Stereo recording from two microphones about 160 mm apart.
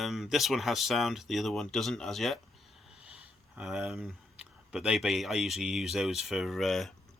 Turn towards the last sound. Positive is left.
turn(degrees=0)  # may be behind; listen again after turning